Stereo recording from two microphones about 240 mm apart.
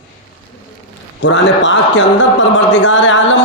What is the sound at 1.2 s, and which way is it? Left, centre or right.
A man's voice, left.